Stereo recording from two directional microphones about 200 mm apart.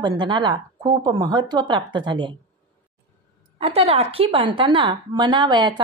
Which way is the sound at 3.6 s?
30° right (ahead or behind).